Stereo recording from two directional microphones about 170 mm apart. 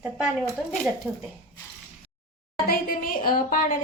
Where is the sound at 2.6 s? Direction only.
60° left (ahead or behind).